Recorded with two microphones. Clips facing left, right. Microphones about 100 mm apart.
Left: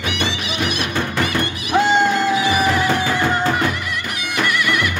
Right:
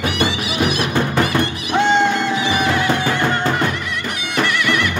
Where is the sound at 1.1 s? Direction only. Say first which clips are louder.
Right 3 dB; centre (ahead or behind).